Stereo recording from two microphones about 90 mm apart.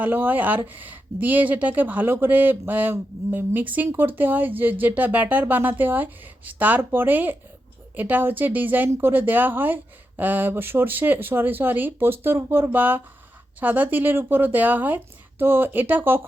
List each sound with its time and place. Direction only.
0.0 s speech: 20° right (ahead or behind)